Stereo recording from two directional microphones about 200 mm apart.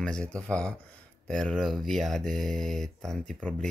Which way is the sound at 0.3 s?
5° left (ahead or behind).